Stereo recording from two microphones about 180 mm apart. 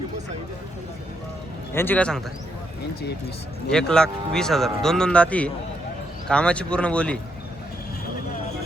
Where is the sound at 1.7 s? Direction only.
10° left (ahead or behind).